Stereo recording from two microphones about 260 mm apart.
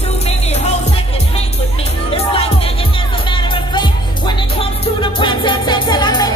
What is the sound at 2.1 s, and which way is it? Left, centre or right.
Music, left.